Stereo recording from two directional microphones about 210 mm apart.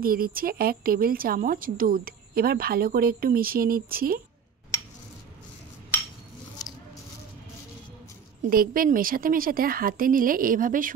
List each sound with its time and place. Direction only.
0.0 s a woman's voice: 45° right (ahead or behind)
8.4 s a woman's voice: 45° right (ahead or behind)